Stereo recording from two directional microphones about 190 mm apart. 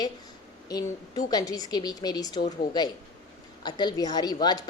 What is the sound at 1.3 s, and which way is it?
A woman's voice, 20° left (ahead or behind).